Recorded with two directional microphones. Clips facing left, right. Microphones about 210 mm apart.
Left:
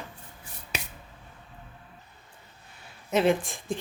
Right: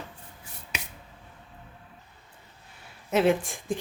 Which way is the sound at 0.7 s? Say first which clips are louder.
Left 3 dB; 35° left (ahead or behind).